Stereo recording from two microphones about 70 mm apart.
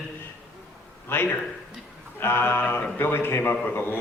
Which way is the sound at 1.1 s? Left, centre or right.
Left.